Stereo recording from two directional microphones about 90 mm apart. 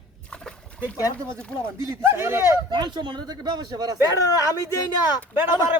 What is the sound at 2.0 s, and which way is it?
Speech, 25° right (ahead or behind).